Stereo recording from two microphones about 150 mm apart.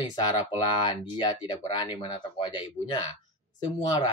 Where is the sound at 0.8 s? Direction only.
30° left (ahead or behind).